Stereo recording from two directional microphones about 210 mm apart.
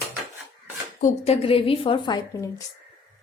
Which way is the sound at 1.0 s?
30° left (ahead or behind).